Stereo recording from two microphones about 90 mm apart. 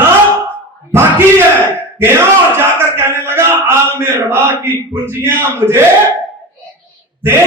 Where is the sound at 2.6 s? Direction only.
25° right (ahead or behind).